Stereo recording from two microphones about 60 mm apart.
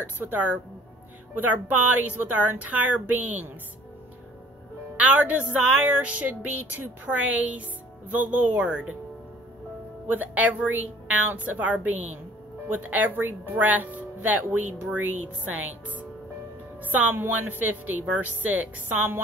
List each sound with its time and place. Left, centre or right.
0.2 s speech: right
4.9 s speech: right
10.0 s speech: right